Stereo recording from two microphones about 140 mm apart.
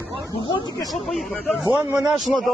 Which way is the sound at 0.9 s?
Centre (ahead or behind).